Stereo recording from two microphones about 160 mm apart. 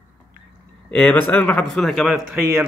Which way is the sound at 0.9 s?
10° left (ahead or behind).